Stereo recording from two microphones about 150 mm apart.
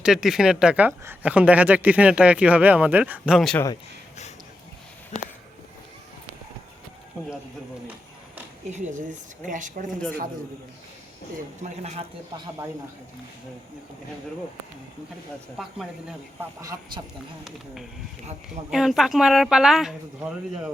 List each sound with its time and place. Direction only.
0.0 s a woman's voice: 5° right (ahead or behind)
7.2 s speech: 5° right (ahead or behind)
8.7 s speech: 55° right (ahead or behind)
11.6 s speech: 50° right (ahead or behind)
15.5 s speech: centre (ahead or behind)
16.4 s speech: 20° right (ahead or behind)
18.4 s speech: 5° right (ahead or behind)